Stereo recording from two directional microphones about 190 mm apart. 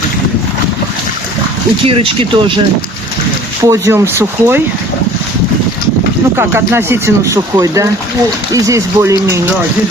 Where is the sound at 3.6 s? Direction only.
15° right (ahead or behind).